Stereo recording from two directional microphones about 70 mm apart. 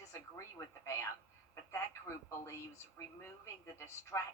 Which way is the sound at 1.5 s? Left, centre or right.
Left.